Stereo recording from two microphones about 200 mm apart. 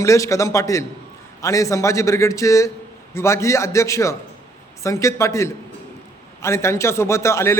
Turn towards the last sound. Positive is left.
turn(degrees=15)  # may be behind; listen again after turning